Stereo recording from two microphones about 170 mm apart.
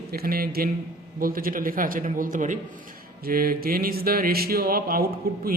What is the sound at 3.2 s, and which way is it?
A man's voice, 60° right (ahead or behind).